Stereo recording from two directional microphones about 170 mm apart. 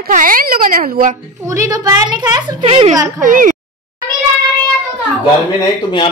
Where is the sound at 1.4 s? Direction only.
20° right (ahead or behind).